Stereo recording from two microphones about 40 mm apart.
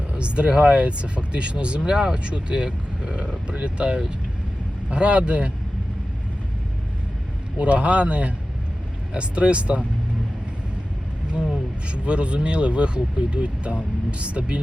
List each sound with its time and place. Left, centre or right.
0.1 s speech: right
7.6 s speech: right
11.9 s speech: right